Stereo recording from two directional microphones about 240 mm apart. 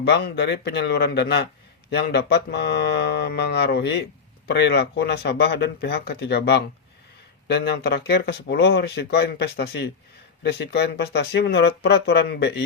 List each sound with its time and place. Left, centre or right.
0.0 s speech: left